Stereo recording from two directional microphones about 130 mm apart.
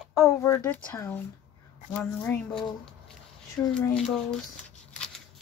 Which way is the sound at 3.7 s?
5° left (ahead or behind).